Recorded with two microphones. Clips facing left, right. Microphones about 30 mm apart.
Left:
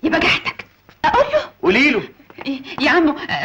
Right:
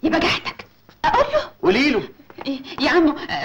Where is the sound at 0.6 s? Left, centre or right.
Centre.